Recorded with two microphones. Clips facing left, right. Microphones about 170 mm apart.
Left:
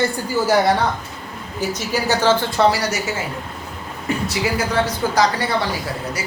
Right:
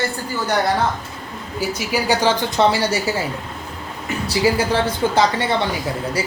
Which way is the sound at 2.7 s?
25° right (ahead or behind).